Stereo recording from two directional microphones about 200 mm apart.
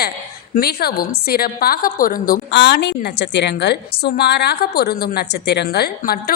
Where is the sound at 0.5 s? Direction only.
50° left (ahead or behind).